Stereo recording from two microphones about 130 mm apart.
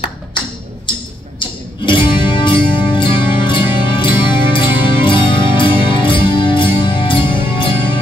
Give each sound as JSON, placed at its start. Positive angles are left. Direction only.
{"t": 1.9, "sound": "music", "side_deg": 40}